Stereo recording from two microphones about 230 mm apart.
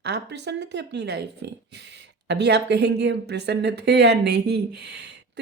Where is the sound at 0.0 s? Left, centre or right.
Right.